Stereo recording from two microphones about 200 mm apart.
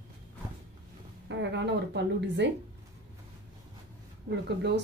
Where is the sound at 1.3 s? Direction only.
60° right (ahead or behind).